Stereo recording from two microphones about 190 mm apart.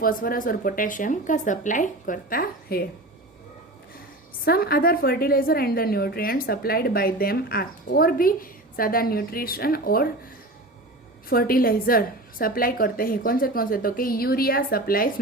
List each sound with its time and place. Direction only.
0.0 s a woman's voice: 50° left (ahead or behind)
4.4 s a woman's voice: 55° left (ahead or behind)
11.3 s a woman's voice: 50° left (ahead or behind)